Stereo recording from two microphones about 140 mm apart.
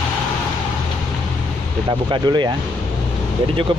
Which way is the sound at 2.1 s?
35° right (ahead or behind).